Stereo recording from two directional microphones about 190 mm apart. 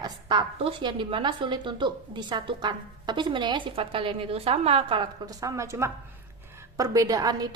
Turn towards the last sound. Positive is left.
turn(degrees=-20)  # may be behind; listen again after turning